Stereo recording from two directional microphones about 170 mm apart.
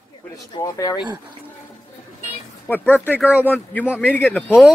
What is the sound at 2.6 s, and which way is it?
Speech, 10° left (ahead or behind).